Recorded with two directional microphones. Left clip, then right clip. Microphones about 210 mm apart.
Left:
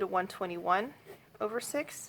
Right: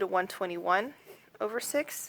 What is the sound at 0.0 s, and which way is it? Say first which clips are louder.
Speech: right 2 dB; 25° right (ahead or behind).